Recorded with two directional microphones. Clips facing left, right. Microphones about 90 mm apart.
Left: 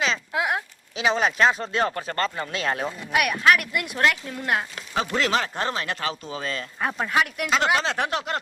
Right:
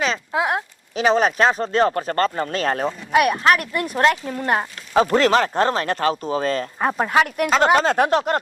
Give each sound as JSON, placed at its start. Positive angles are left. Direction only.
{"t": 0.3, "sound": "a sound", "side_deg": -30}
{"t": 0.9, "sound": "speech", "side_deg": -40}
{"t": 6.7, "sound": "speech", "side_deg": -30}